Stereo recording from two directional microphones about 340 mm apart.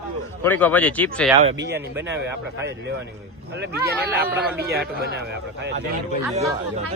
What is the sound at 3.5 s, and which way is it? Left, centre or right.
Speech, right.